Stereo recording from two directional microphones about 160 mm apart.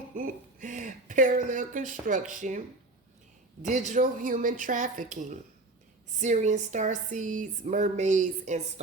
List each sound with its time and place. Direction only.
0.2 s speech: 55° right (ahead or behind)
3.6 s speech: 50° right (ahead or behind)